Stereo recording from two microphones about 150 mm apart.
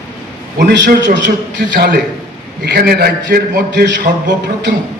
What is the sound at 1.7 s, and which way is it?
Speech, 70° right (ahead or behind).